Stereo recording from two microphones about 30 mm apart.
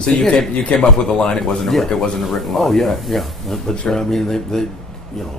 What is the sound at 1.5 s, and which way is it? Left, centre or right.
Speech, centre.